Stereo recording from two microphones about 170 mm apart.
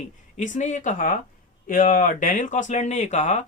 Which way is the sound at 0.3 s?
45° left (ahead or behind).